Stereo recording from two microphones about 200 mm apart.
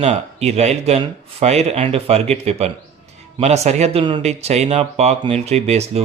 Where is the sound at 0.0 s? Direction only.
30° right (ahead or behind).